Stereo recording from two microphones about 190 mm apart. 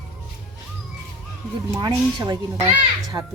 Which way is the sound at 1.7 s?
20° right (ahead or behind).